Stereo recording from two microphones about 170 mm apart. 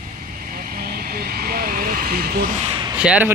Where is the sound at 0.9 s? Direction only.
60° right (ahead or behind).